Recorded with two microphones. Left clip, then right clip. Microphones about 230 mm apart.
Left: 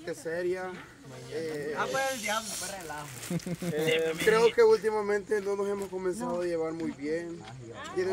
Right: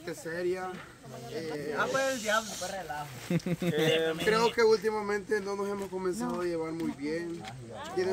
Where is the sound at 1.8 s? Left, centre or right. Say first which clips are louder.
Right 2 dB; left.